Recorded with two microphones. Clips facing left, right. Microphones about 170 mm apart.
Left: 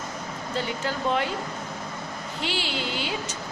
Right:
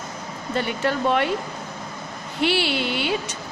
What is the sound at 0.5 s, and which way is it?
Speech, 65° right (ahead or behind).